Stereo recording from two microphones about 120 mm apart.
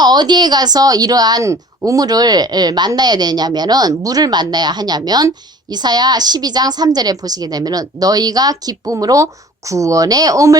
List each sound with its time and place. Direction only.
0.0 s a woman's voice: 35° right (ahead or behind)